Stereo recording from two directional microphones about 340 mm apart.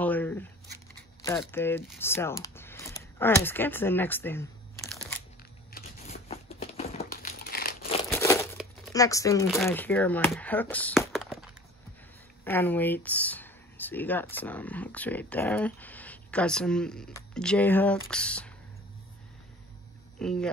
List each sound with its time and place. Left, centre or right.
0.0 s a sound: centre
1.2 s speech: centre
5.7 s crumpling: left
8.1 s crumpling: centre
8.9 s speech: centre
20.2 s speech: centre